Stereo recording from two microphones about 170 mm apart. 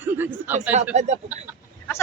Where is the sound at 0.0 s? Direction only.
10° right (ahead or behind).